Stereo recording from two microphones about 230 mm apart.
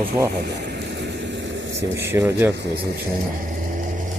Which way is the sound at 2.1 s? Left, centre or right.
Centre.